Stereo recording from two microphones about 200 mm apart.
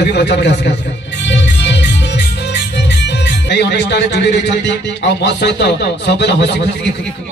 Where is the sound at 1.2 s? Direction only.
65° left (ahead or behind).